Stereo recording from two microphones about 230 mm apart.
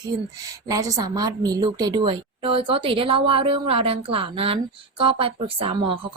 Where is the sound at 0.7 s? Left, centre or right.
Centre.